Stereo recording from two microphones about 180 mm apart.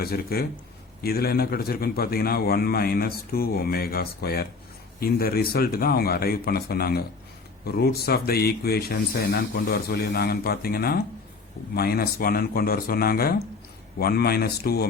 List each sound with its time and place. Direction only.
0.0 s a man's voice: 60° left (ahead or behind)